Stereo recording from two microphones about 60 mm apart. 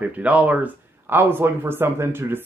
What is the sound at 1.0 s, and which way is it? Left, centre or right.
Speech, right.